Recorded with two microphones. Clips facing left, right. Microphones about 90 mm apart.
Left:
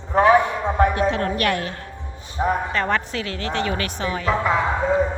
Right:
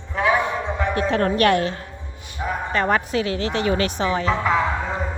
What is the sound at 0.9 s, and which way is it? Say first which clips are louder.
Speech: right 1 dB; 40° right (ahead or behind).